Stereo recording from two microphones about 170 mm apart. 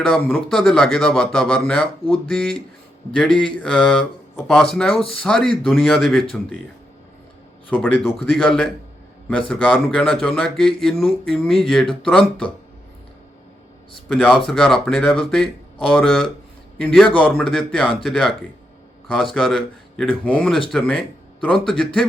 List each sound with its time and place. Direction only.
0.1 s speech: 10° left (ahead or behind)
7.7 s speech: 10° left (ahead or behind)
14.1 s speech: centre (ahead or behind)